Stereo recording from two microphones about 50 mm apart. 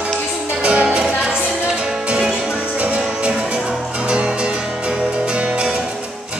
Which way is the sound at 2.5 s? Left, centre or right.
Right.